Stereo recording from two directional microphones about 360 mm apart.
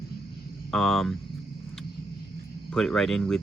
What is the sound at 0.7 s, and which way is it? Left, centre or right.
Speech, centre.